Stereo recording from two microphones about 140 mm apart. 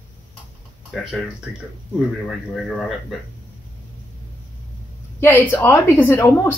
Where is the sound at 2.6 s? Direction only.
Centre (ahead or behind).